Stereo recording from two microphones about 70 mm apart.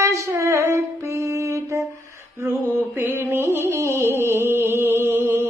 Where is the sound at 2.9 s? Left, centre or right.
Right.